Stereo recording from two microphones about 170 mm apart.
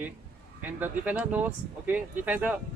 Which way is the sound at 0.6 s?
10° right (ahead or behind).